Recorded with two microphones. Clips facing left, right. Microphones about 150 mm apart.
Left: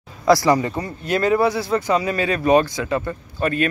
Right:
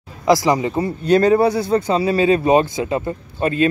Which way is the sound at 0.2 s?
20° right (ahead or behind).